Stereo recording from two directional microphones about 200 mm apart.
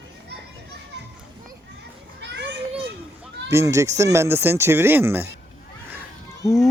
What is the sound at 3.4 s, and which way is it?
Speech, 15° right (ahead or behind).